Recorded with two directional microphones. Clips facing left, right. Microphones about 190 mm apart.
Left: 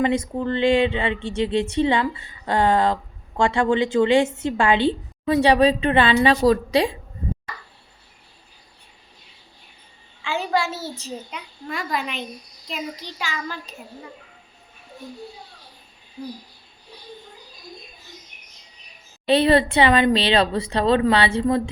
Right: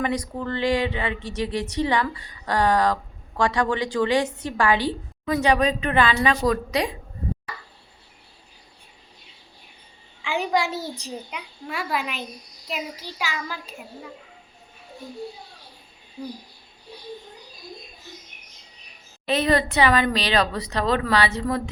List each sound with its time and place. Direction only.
0.0 s speech: 25° left (ahead or behind)
10.2 s a child's voice: 15° right (ahead or behind)
19.3 s speech: 30° left (ahead or behind)